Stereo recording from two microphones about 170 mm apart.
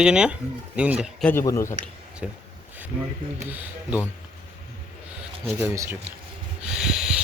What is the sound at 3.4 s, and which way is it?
Speech, 10° right (ahead or behind).